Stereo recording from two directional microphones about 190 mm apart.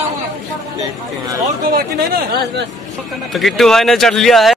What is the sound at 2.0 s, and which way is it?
Speech, 55° right (ahead or behind).